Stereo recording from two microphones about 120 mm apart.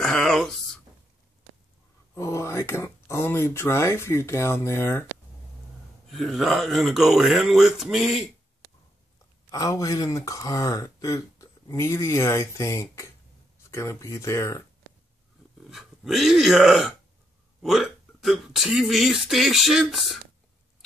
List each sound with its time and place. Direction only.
0.0 s a sound: 5° left (ahead or behind)
2.1 s speech: 25° left (ahead or behind)
6.0 s speech: centre (ahead or behind)
9.5 s speech: 25° left (ahead or behind)
15.7 s speech: 5° right (ahead or behind)